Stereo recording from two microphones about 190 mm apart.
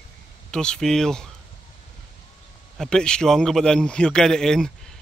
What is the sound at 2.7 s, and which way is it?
Speech, 5° left (ahead or behind).